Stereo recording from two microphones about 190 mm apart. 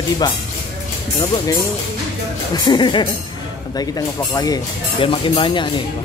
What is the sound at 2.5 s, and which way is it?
Speech, 20° left (ahead or behind).